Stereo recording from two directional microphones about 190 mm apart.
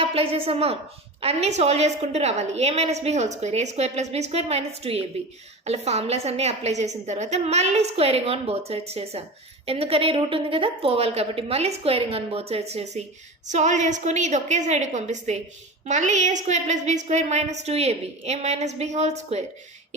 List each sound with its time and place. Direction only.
0.0 s a woman's voice: 30° right (ahead or behind)